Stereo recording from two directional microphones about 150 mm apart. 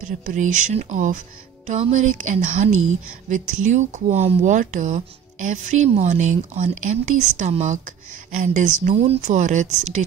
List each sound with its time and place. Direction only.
0.2 s speech: 55° right (ahead or behind)
8.3 s speech: 60° right (ahead or behind)
8.9 s speech: 40° right (ahead or behind)
9.3 s speech: 55° right (ahead or behind)